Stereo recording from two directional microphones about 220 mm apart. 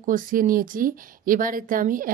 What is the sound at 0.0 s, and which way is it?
A woman's voice, 40° right (ahead or behind).